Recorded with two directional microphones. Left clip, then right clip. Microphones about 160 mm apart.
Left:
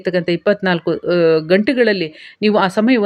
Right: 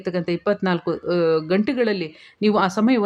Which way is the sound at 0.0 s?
20° left (ahead or behind).